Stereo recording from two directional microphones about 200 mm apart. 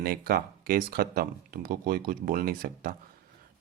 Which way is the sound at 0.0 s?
50° right (ahead or behind).